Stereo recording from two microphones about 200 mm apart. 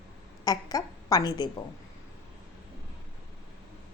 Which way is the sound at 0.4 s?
20° left (ahead or behind).